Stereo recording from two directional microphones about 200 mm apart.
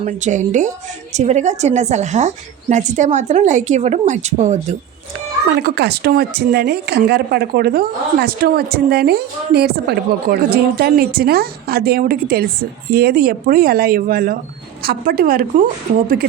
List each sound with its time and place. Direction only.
0.0 s a woman's voice: 40° right (ahead or behind)
5.5 s speech: 55° right (ahead or behind)